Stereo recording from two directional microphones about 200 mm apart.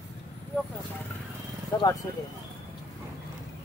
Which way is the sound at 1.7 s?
15° left (ahead or behind).